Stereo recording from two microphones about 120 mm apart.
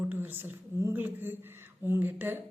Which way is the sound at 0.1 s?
15° right (ahead or behind).